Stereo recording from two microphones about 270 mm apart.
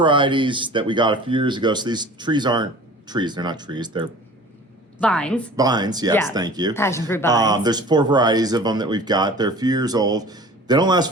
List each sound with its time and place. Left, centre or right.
0.0 s speech: centre
4.9 s a woman's voice: centre
5.5 s speech: centre
6.7 s speech: centre
7.3 s speech: centre